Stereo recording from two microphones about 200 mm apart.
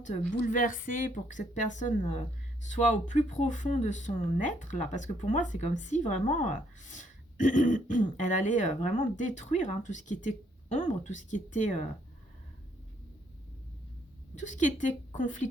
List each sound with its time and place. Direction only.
0.0 s speech: 40° left (ahead or behind)
14.3 s speech: 40° left (ahead or behind)